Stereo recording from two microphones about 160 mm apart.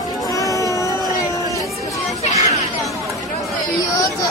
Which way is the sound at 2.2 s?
45° left (ahead or behind).